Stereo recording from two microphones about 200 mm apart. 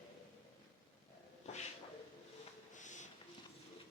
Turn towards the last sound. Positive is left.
turn(degrees=40)  # may be behind; listen again after turning